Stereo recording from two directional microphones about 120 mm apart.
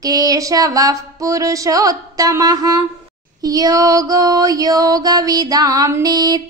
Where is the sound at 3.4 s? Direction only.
30° right (ahead or behind).